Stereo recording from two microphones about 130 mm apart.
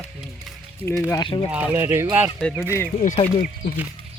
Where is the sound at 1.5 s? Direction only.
10° right (ahead or behind).